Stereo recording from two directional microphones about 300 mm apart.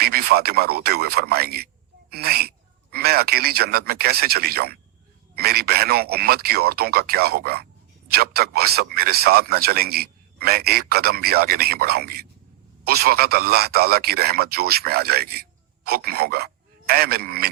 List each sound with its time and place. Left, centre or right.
0.0 s speech: right